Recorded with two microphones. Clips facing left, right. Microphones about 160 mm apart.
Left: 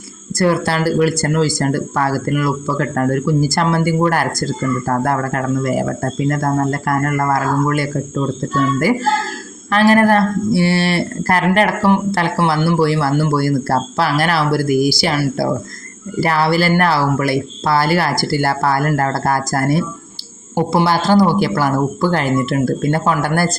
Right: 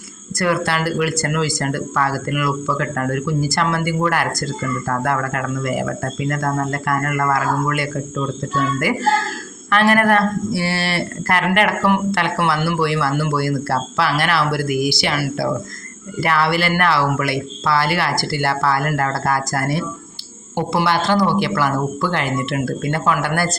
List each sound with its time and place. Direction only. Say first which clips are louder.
0.3 s speech: left 4 dB; 35° left (ahead or behind)
9.6 s speech: left 3 dB; 35° left (ahead or behind)
20.8 s speech: left 4 dB; 40° left (ahead or behind)